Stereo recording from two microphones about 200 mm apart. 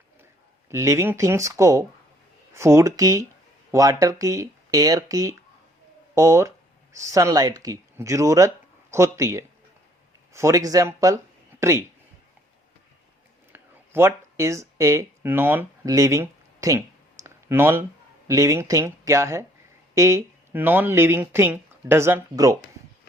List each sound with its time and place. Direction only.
0.7 s speech: 15° right (ahead or behind)
13.5 s a sound: 10° right (ahead or behind)
18.3 s speech: 15° right (ahead or behind)